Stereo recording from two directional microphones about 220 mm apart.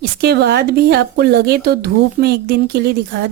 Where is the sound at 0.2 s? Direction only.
50° right (ahead or behind).